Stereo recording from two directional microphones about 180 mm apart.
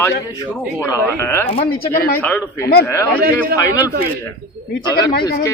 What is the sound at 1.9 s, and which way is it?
Speech, 55° left (ahead or behind).